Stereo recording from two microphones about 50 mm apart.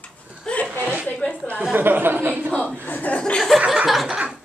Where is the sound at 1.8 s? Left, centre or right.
Right.